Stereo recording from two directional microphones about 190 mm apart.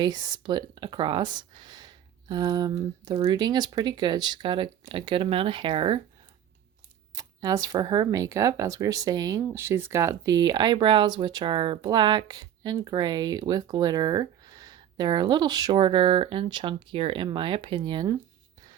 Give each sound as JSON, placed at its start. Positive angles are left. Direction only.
{"t": 0.0, "sound": "speech", "side_deg": -20}
{"t": 7.2, "sound": "speech", "side_deg": -20}